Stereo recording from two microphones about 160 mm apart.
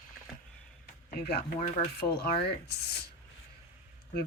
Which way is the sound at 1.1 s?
75° left (ahead or behind).